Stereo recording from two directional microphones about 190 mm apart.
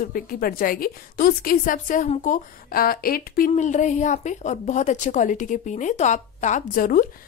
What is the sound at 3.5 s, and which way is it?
A woman's voice, 40° left (ahead or behind).